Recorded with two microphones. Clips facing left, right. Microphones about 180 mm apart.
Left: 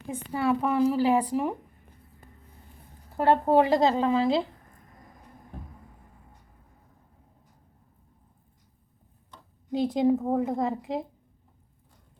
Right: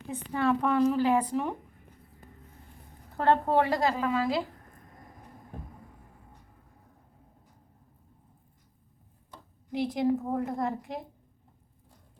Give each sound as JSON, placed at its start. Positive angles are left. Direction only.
{"t": 0.1, "sound": "a woman's voice", "side_deg": 10}
{"t": 3.2, "sound": "a woman's voice", "side_deg": 15}
{"t": 9.7, "sound": "a woman's voice", "side_deg": 20}